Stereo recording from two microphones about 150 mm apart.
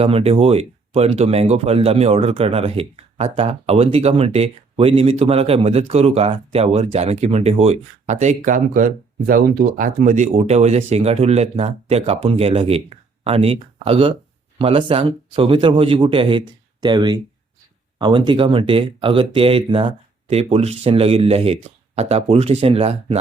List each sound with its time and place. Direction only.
0.0 s speech: 40° right (ahead or behind)